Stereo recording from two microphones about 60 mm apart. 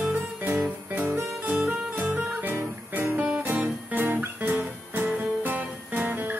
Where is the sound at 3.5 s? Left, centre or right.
Right.